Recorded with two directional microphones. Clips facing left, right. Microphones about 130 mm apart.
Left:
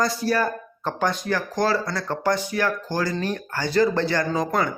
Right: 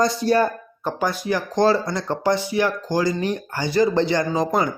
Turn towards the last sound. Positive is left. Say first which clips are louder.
# right 2 dB
turn(degrees=-20)  # may be behind; listen again after turning